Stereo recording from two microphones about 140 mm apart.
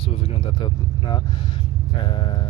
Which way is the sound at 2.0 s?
35° left (ahead or behind).